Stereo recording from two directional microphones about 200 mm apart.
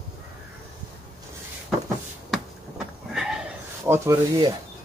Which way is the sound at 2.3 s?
Centre (ahead or behind).